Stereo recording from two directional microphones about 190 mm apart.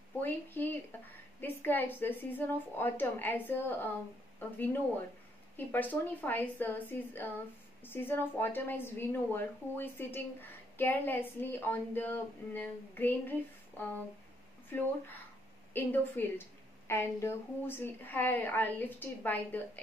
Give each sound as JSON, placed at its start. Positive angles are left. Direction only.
{"t": 0.1, "sound": "a woman's voice", "side_deg": 10}
{"t": 15.7, "sound": "a woman's voice", "side_deg": 10}